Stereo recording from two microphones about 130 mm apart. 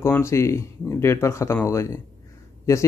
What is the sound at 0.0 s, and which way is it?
Speech, 20° left (ahead or behind).